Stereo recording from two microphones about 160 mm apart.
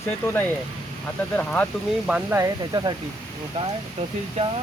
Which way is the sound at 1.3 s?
10° left (ahead or behind).